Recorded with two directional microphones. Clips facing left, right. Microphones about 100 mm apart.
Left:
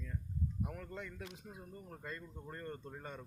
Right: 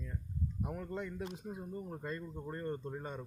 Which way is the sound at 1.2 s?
30° right (ahead or behind).